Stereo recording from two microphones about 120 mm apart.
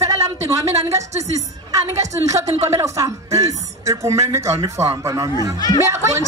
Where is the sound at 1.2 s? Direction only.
30° right (ahead or behind).